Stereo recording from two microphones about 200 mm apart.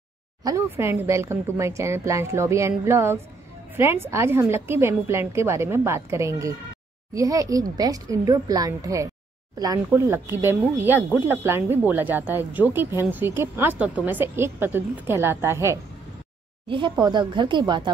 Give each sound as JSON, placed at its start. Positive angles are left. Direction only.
{"t": 0.4, "sound": "speech", "side_deg": -15}
{"t": 16.6, "sound": "a woman's voice", "side_deg": -25}